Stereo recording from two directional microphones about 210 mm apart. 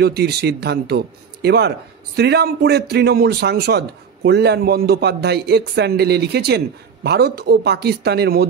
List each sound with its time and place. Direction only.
0.0 s a man's voice: 50° right (ahead or behind)